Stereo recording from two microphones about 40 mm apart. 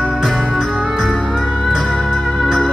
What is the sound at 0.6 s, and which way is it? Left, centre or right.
Music, centre.